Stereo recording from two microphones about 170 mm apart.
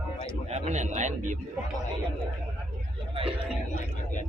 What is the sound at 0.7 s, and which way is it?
Speech, 45° right (ahead or behind).